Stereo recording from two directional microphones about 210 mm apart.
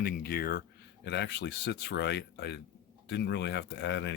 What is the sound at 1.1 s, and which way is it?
Speech, 55° left (ahead or behind).